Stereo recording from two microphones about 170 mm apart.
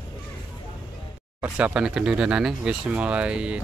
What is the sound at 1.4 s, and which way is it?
Speech, 10° right (ahead or behind).